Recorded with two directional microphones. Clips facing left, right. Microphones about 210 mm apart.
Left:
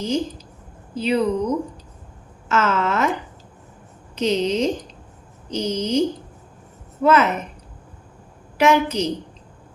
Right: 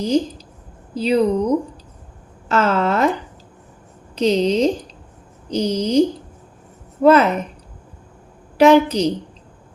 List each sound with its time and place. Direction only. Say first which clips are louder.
0.0 s speech: right 5 dB; 35° right (ahead or behind)
7.0 s speech: right 4 dB; 35° right (ahead or behind)
8.5 s speech: right 6 dB; 35° right (ahead or behind)